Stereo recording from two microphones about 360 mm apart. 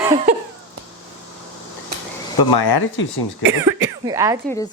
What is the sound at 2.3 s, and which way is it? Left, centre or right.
Speech, left.